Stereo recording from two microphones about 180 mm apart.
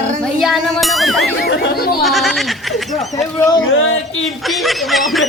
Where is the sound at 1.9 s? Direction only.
Centre (ahead or behind).